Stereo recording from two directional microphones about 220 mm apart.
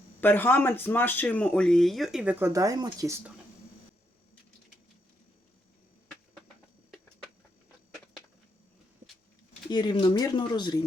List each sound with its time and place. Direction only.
0.2 s speech: 10° left (ahead or behind); by 3.3 s 10° right (ahead or behind)
9.6 s speech: 20° left (ahead or behind)